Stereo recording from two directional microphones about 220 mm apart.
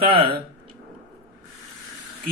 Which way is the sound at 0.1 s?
25° right (ahead or behind).